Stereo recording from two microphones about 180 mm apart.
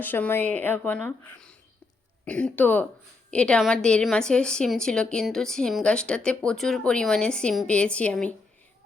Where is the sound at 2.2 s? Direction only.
5° left (ahead or behind).